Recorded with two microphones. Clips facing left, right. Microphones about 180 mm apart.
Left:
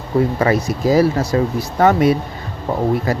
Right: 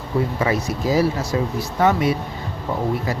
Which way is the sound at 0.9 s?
35° left (ahead or behind).